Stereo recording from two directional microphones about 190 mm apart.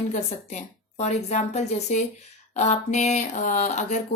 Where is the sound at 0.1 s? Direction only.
35° left (ahead or behind).